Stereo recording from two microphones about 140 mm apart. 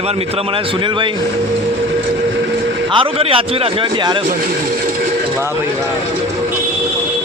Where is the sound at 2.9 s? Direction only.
40° right (ahead or behind).